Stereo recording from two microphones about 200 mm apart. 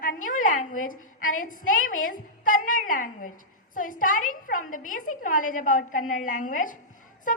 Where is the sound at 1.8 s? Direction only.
90° left.